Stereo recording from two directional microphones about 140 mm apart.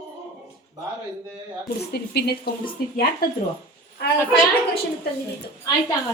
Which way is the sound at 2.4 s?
90° left.